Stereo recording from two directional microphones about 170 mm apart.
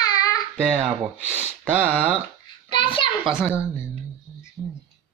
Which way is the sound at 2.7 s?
30° left (ahead or behind).